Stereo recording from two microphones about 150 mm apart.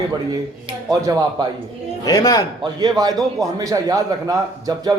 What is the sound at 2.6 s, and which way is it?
A man's voice, 25° right (ahead or behind).